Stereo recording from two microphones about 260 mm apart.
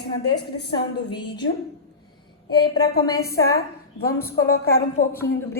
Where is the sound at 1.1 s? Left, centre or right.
Centre.